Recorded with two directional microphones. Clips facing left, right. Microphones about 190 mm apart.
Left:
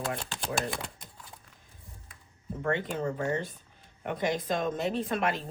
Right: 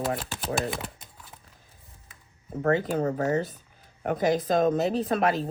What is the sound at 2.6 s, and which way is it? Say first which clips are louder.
A woman's voice: right 6 dB; 40° right (ahead or behind).